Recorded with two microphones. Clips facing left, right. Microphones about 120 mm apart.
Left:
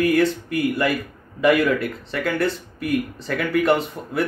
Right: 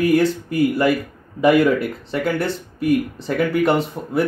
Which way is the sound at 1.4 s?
35° right (ahead or behind).